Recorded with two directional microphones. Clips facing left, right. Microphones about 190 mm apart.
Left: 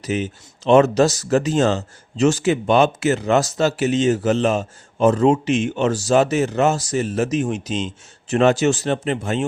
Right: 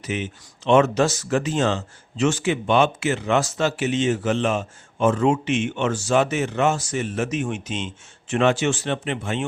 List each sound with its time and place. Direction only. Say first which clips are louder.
0.0 s speech: left 5 dB; 40° left (ahead or behind)